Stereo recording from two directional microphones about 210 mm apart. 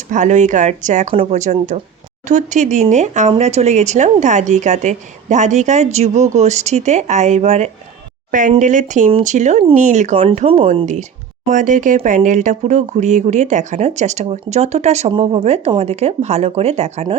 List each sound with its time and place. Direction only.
0.1 s speech: 35° right (ahead or behind)